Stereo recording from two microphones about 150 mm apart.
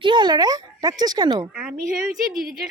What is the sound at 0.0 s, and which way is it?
A child's voice, 30° right (ahead or behind).